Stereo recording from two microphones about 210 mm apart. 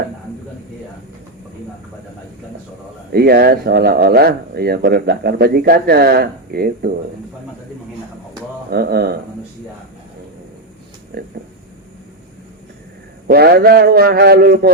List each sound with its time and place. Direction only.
3.1 s speech: 50° right (ahead or behind)
8.7 s speech: 50° right (ahead or behind)
11.1 s speech: 45° right (ahead or behind)
13.2 s speech: 45° right (ahead or behind)